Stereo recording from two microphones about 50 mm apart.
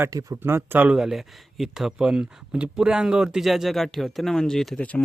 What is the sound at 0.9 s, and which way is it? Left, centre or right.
Speech, centre.